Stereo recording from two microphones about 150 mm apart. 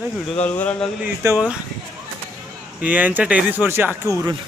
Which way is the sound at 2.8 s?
10° right (ahead or behind).